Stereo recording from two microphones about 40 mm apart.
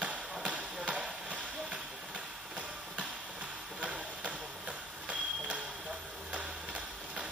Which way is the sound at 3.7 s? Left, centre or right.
Right.